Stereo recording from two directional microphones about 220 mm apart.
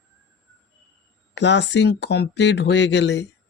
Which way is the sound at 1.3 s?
55° left (ahead or behind).